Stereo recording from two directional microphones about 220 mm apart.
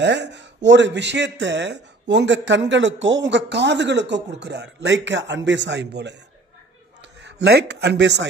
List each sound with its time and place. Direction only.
0.0 s a man's voice: 50° right (ahead or behind)
7.2 s a man's voice: 50° right (ahead or behind)